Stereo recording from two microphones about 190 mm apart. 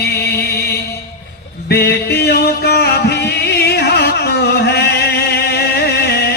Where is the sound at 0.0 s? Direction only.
60° left (ahead or behind).